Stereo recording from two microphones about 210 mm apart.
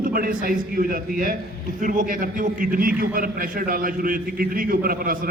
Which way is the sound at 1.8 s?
40° right (ahead or behind).